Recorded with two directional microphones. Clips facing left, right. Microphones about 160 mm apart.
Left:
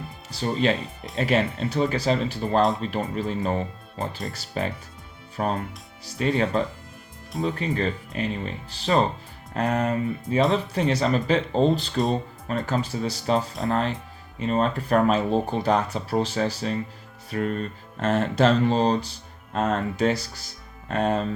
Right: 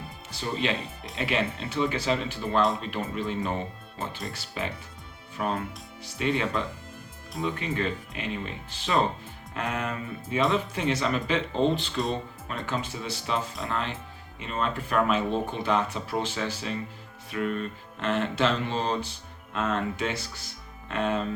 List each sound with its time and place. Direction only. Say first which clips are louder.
0.3 s speech: left 6 dB; 35° left (ahead or behind)
2.6 s speech: left 3 dB; centre (ahead or behind)
2.9 s speech: left 3 dB; 40° left (ahead or behind)